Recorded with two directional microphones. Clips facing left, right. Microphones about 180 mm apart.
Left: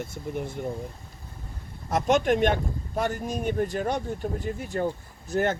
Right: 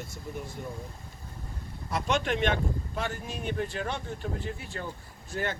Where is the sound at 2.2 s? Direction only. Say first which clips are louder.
Left 5 dB; 45° left (ahead or behind).